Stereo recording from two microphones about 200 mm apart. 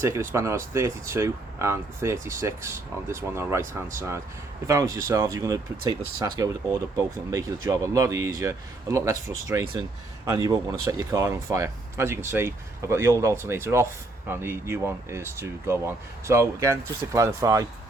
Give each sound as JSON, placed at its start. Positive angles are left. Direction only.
{"t": 0.0, "sound": "speech", "side_deg": -15}